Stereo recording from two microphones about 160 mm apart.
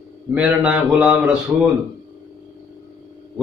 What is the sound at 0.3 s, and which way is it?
A man's voice, 10° right (ahead or behind).